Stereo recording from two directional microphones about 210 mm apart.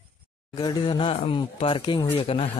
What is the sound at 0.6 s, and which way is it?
Speech, 20° left (ahead or behind).